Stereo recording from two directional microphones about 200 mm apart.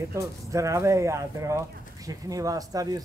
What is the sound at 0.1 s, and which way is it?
Speech, 15° right (ahead or behind).